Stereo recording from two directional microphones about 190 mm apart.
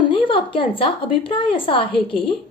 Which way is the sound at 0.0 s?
25° left (ahead or behind).